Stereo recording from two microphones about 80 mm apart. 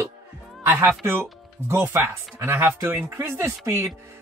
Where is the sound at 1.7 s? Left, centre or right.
Right.